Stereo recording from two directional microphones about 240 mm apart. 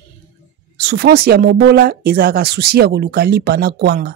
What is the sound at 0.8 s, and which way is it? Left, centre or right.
A woman's voice, right.